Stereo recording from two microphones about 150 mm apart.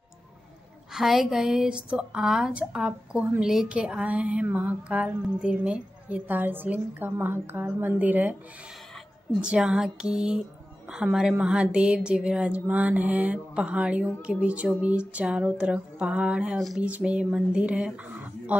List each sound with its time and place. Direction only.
0.9 s a woman's voice: centre (ahead or behind)
9.4 s a woman's voice: 5° right (ahead or behind)